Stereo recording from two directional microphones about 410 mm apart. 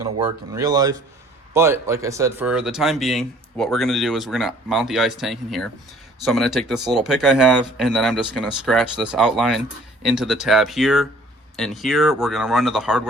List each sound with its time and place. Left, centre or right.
0.5 s speech: centre